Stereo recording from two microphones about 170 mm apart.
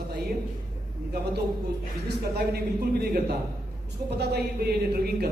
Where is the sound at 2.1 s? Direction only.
75° right (ahead or behind).